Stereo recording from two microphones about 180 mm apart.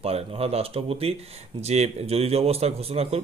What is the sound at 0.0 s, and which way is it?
Speech, 35° right (ahead or behind).